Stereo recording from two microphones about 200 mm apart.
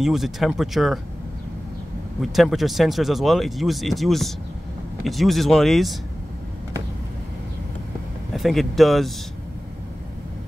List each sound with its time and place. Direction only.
0.0 s speech: centre (ahead or behind)
2.3 s speech: centre (ahead or behind)
8.3 s speech: centre (ahead or behind)